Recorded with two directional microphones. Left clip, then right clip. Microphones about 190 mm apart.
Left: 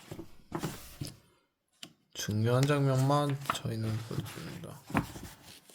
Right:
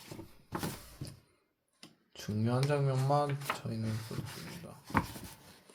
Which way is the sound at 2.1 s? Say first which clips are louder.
Left 5 dB; 45° left (ahead or behind).